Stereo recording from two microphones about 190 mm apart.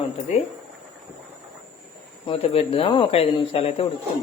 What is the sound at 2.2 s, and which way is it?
A man's voice, 30° left (ahead or behind).